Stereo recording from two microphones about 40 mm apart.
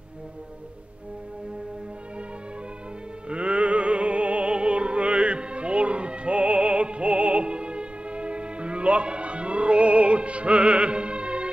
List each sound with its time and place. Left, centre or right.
3.3 s music: right